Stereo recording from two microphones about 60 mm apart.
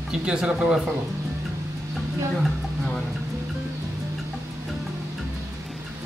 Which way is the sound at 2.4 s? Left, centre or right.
Centre.